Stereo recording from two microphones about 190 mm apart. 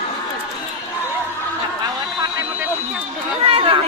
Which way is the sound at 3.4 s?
30° right (ahead or behind).